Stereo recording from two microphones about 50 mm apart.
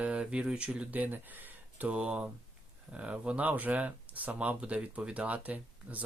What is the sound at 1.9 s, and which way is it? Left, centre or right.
Speech, right.